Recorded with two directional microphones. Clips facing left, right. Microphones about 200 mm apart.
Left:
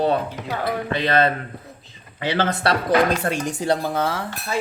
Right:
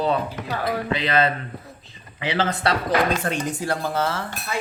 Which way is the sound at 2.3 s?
55° left (ahead or behind).